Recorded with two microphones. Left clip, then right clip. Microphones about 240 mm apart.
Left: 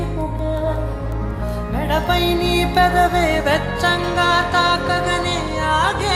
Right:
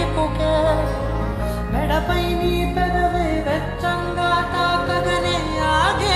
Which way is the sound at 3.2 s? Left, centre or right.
Left.